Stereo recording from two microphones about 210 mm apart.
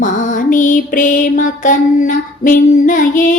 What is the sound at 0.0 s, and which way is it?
Music, 35° left (ahead or behind).